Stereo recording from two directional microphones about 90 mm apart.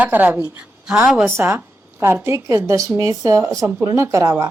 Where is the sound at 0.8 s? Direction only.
10° right (ahead or behind).